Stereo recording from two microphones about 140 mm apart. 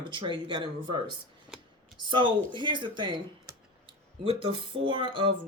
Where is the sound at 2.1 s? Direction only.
35° right (ahead or behind).